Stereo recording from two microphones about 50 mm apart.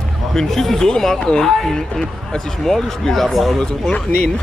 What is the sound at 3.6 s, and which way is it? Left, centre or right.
Speech, centre.